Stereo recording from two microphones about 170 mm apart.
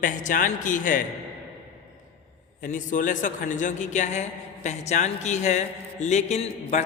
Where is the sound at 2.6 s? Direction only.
50° left (ahead or behind).